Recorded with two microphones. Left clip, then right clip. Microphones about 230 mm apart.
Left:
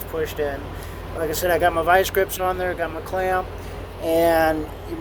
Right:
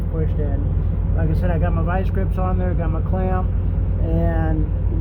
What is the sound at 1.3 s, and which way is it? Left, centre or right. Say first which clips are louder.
Speech: left 9 dB; left.